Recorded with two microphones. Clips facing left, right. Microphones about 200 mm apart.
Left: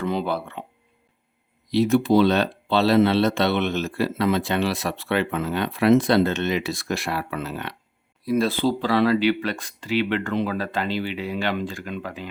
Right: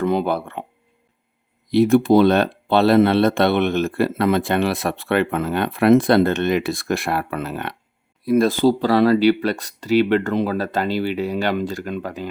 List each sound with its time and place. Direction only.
0.0 s speech: 50° right (ahead or behind)
1.7 s speech: 55° right (ahead or behind)